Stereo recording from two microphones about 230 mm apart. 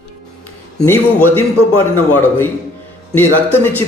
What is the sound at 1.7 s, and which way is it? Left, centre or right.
Speech, left.